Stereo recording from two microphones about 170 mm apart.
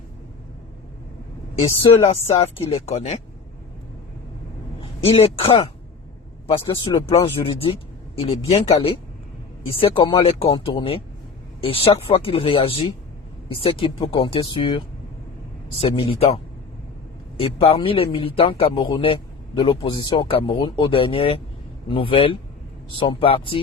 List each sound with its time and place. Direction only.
1.8 s a man's voice: 35° left (ahead or behind)
4.8 s speech: 35° left (ahead or behind)
6.7 s a man's voice: 30° left (ahead or behind)
9.6 s a man's voice: 30° left (ahead or behind)